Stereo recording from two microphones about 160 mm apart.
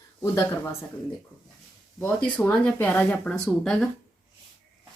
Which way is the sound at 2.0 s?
10° left (ahead or behind).